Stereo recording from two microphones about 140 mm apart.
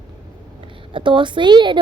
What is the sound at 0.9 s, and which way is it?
Speech, 35° right (ahead or behind).